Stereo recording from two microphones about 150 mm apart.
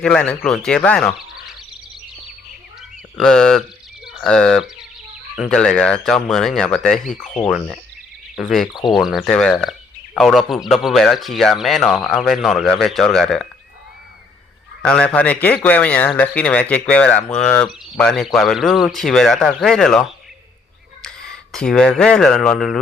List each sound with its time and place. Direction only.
0.0 s speech: 5° left (ahead or behind)
3.2 s speech: 5° left (ahead or behind)
14.8 s a man's voice: 10° left (ahead or behind)
21.5 s speech: 5° left (ahead or behind)